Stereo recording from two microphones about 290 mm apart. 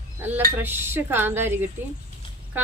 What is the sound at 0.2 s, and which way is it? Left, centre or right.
A woman's voice, centre.